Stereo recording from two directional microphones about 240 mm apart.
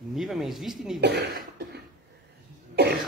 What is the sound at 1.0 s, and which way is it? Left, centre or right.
Cough, right.